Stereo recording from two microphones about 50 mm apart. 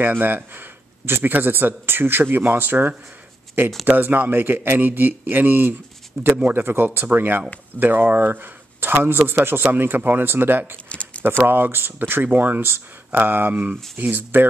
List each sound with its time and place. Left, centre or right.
0.0 s speech: right
10.9 s a sound: left
11.2 s speech: right